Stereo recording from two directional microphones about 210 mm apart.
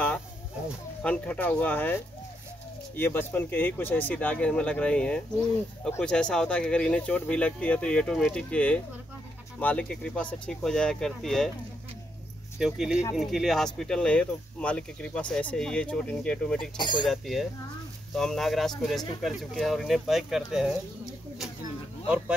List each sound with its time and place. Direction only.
1.0 s speech: 5° left (ahead or behind)
3.0 s speech: 10° left (ahead or behind)
12.5 s speech: centre (ahead or behind)
16.7 s speech: 20° left (ahead or behind)
17.1 s speech: centre (ahead or behind)